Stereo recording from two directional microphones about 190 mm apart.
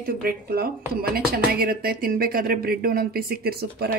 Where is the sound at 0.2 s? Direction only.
55° right (ahead or behind).